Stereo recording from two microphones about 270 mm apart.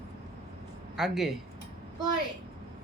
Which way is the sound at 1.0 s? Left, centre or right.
Centre.